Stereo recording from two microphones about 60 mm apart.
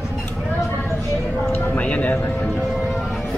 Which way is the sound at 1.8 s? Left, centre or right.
Left.